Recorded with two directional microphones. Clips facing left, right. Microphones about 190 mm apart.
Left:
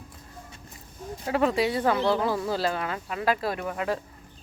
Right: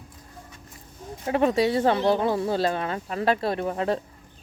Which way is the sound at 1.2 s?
25° right (ahead or behind).